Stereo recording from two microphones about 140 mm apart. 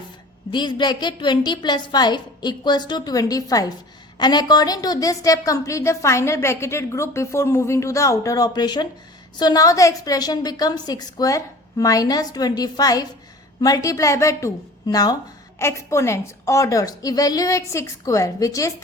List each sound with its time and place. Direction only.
0.5 s a woman's voice: 35° left (ahead or behind)